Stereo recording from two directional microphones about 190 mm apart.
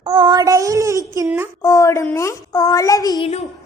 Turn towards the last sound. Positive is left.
turn(degrees=35)  # may be behind; listen again after turning